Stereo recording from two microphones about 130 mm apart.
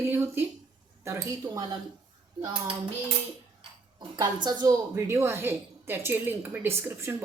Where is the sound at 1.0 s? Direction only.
20° right (ahead or behind).